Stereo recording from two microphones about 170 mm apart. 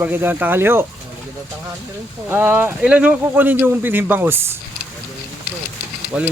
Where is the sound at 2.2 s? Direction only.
10° right (ahead or behind).